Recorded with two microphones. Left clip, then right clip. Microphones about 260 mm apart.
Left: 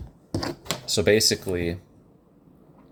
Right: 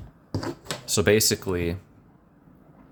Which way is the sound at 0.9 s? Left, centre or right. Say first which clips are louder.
Left 1 dB; centre.